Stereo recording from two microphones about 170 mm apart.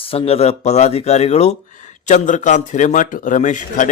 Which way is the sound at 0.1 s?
35° left (ahead or behind).